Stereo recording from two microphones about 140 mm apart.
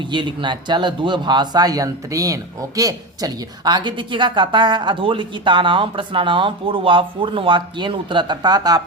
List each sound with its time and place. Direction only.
0.0 s speech: 35° right (ahead or behind)